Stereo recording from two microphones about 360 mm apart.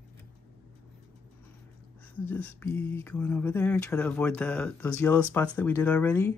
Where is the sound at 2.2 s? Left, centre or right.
Centre.